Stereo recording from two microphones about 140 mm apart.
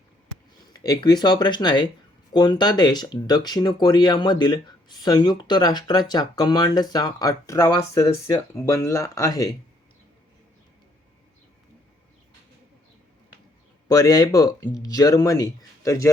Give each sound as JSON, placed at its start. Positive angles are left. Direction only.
{"t": 0.6, "sound": "speech", "side_deg": 25}
{"t": 13.8, "sound": "speech", "side_deg": 25}